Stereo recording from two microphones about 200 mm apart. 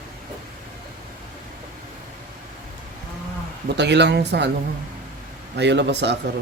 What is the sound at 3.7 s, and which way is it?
Speech, 60° right (ahead or behind).